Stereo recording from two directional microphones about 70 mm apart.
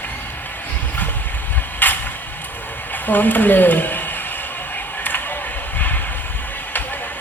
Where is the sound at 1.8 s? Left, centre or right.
Left.